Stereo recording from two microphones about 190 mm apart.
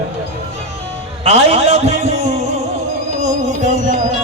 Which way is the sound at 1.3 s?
30° right (ahead or behind).